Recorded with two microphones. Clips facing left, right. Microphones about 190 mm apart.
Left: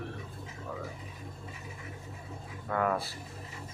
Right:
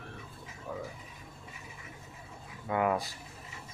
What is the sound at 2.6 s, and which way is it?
Speech, 15° right (ahead or behind).